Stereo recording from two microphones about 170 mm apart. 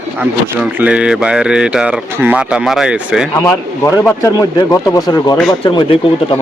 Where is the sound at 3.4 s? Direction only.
15° left (ahead or behind).